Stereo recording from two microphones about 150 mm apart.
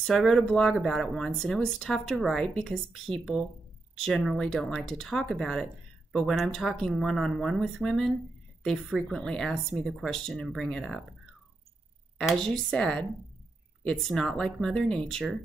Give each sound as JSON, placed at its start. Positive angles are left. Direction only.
{"t": 0.0, "sound": "speech", "side_deg": 0}
{"t": 12.2, "sound": "speech", "side_deg": 5}